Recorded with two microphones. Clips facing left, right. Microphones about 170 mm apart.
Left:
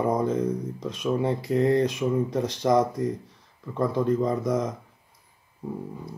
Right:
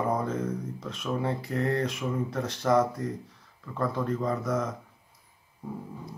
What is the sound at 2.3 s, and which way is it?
Mantra, 15° left (ahead or behind).